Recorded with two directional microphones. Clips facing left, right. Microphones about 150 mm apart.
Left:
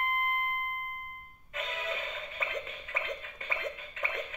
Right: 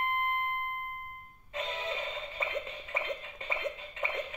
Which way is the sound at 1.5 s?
25° right (ahead or behind).